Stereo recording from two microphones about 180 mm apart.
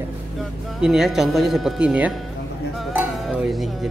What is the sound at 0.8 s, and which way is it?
Speech, centre (ahead or behind).